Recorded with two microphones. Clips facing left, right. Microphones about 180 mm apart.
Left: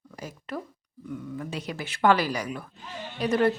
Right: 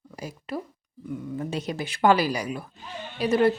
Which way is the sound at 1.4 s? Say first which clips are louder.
Right 4 dB; 25° right (ahead or behind).